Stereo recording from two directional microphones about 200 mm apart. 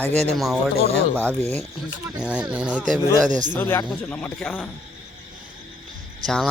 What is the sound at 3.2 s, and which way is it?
Speech, 40° right (ahead or behind).